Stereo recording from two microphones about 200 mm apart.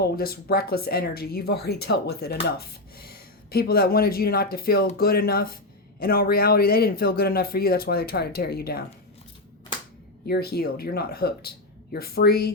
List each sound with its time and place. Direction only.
0.0 s speech: 50° left (ahead or behind)
10.2 s speech: 50° left (ahead or behind)